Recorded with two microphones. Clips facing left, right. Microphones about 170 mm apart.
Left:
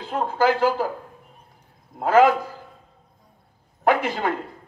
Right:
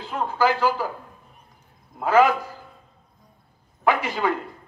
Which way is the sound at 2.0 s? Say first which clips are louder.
Left 2 dB; 50° left (ahead or behind).